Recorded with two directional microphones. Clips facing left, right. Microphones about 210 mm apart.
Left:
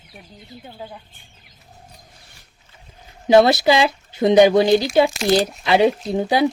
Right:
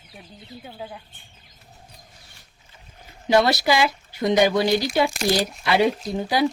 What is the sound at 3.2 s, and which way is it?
Speech, 20° left (ahead or behind).